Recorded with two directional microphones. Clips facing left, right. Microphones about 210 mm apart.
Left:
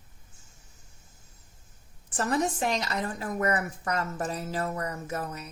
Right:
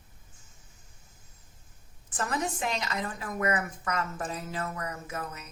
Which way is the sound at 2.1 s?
35° left (ahead or behind).